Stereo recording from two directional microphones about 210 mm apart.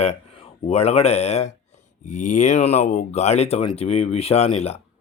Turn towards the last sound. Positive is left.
turn(degrees=30)  # may be behind; listen again after turning